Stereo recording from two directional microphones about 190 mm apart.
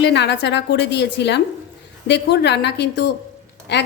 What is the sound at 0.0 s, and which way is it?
A woman's voice, 65° left (ahead or behind).